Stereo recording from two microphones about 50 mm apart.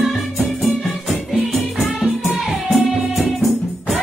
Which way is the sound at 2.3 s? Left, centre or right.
Centre.